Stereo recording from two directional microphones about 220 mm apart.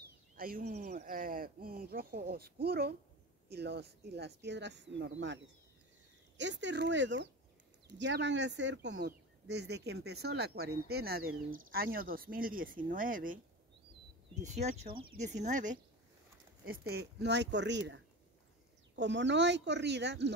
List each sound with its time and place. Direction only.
0.4 s speech: 40° right (ahead or behind)
16.6 s speech: 45° right (ahead or behind)